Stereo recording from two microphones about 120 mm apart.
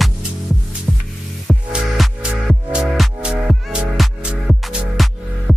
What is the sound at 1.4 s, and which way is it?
Music, centre (ahead or behind).